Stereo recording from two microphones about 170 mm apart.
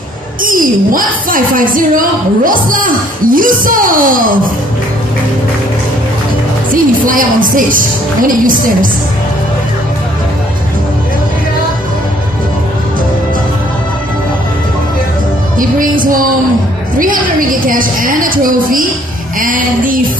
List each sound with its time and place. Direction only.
0.4 s speech: 55° right (ahead or behind)
6.7 s speech: 55° right (ahead or behind)
15.6 s speech: 55° right (ahead or behind)